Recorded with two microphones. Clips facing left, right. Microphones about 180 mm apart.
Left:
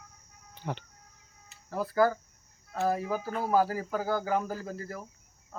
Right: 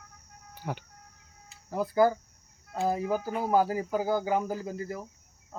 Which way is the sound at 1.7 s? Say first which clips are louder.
Right 2 dB; 20° right (ahead or behind).